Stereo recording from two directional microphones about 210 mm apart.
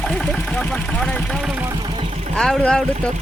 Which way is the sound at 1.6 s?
20° right (ahead or behind).